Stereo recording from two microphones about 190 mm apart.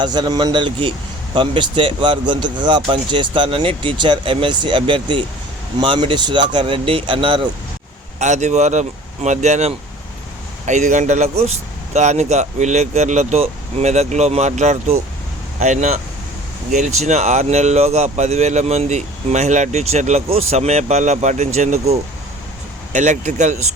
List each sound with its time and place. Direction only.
0.0 s a man's voice: 20° right (ahead or behind)
8.2 s speech: 40° right (ahead or behind)
17.0 s speech: 35° right (ahead or behind)